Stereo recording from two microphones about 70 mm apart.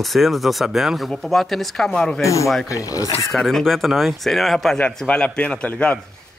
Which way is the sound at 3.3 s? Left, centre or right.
Centre.